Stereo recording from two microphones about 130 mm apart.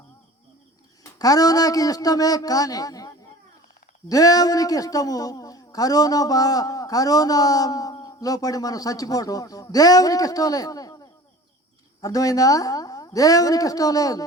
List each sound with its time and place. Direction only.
1.2 s a man's voice: 30° left (ahead or behind)
4.1 s a man's voice: 30° left (ahead or behind)